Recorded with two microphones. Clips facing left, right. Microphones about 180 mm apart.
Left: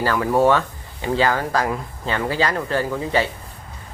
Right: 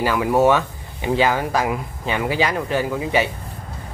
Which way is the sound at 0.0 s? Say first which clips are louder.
Right 1 dB; 10° right (ahead or behind).